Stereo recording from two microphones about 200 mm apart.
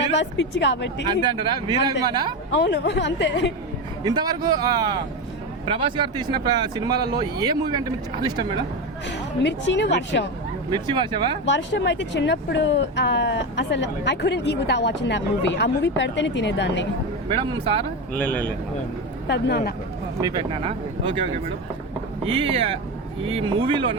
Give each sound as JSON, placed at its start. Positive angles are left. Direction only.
{"t": 0.2, "sound": "speech", "side_deg": 60}
{"t": 1.2, "sound": "speech", "side_deg": -25}
{"t": 2.5, "sound": "speech", "side_deg": 60}
{"t": 4.0, "sound": "speech", "side_deg": -20}
{"t": 9.0, "sound": "speech", "side_deg": 60}
{"t": 10.7, "sound": "speech", "side_deg": -20}
{"t": 11.4, "sound": "speech", "side_deg": 65}
{"t": 17.4, "sound": "speech", "side_deg": -25}
{"t": 18.1, "sound": "a man's voice", "side_deg": 5}
{"t": 19.3, "sound": "a woman's voice", "side_deg": 55}
{"t": 20.2, "sound": "speech", "side_deg": -25}
{"t": 22.2, "sound": "speech", "side_deg": -30}